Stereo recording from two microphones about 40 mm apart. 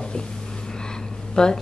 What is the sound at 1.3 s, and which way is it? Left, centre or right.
Speech, centre.